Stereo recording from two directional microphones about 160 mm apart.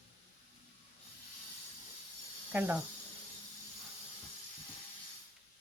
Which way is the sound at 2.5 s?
10° right (ahead or behind).